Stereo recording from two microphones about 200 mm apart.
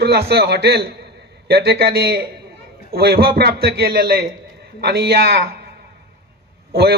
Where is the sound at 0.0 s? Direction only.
55° right (ahead or behind).